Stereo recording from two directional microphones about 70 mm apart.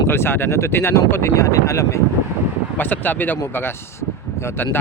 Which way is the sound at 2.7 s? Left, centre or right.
Left.